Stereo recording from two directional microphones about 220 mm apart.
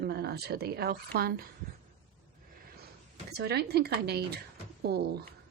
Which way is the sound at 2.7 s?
45° right (ahead or behind).